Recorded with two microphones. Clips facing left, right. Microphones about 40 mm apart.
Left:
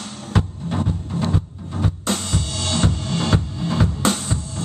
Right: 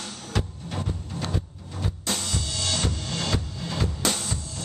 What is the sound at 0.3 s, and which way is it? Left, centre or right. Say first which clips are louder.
Music: left 8 dB; left.